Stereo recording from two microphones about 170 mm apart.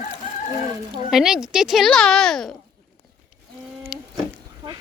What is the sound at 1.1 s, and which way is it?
A child's voice, 5° right (ahead or behind).